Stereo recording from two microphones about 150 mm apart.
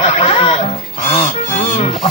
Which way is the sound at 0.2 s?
35° left (ahead or behind).